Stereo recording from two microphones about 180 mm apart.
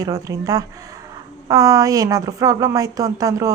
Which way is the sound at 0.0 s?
20° right (ahead or behind).